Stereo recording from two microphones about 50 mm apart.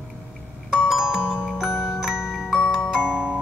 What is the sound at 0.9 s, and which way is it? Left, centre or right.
Music, centre.